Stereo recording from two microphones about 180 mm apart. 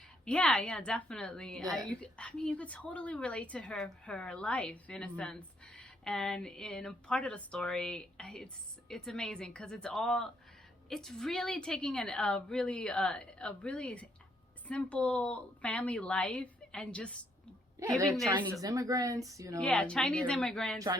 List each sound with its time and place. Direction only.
0.3 s a woman's voice: 5° left (ahead or behind)
18.6 s speech: 20° right (ahead or behind)
19.5 s speech: 5° left (ahead or behind)
20.7 s speech: 20° right (ahead or behind)